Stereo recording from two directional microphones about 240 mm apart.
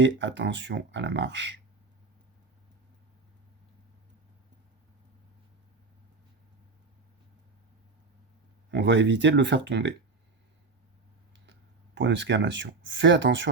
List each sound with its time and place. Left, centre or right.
0.0 s speech: right
8.7 s speech: right
11.9 s speech: right